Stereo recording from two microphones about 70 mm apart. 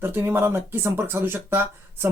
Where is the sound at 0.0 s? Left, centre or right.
Right.